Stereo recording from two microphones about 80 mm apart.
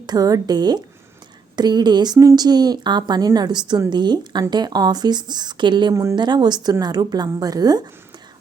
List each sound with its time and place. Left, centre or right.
0.0 s speech: right
2.1 s speech: right
5.9 s speech: right
6.1 s speech: right